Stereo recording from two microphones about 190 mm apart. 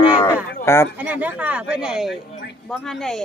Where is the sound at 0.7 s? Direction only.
15° left (ahead or behind).